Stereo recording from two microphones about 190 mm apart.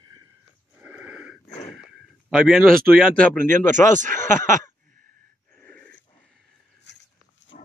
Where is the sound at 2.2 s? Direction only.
Centre (ahead or behind).